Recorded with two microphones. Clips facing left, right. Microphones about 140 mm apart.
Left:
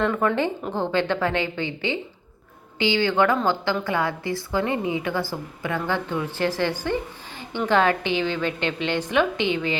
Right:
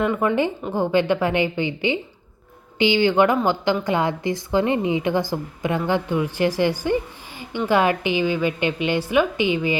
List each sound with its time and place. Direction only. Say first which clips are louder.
0.0 s a woman's voice: right 2 dB; 5° right (ahead or behind)